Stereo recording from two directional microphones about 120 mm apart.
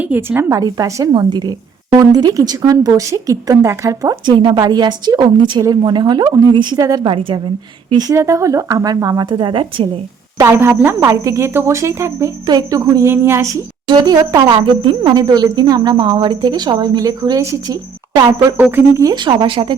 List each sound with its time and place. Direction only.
0.0 s speech: 15° right (ahead or behind)
0.5 s speech: 30° right (ahead or behind)
7.0 s a woman's voice: 45° right (ahead or behind)
10.3 s speech: 25° right (ahead or behind)
13.8 s speech: 35° right (ahead or behind)
14.5 s speech: 40° right (ahead or behind)
18.5 s speech: 15° right (ahead or behind)
19.0 s speech: 40° right (ahead or behind)